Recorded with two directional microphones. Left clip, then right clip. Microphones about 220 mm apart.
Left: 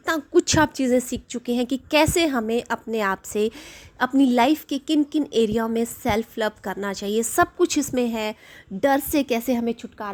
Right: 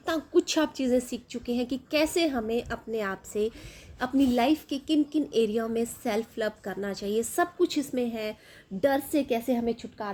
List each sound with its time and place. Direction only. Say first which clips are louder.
0.0 s a woman's voice: left 5 dB; 35° left (ahead or behind)